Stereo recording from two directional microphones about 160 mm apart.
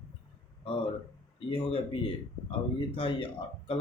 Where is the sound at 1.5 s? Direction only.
35° left (ahead or behind).